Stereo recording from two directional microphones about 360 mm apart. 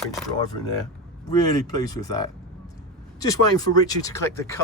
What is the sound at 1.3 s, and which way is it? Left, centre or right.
Speech, centre.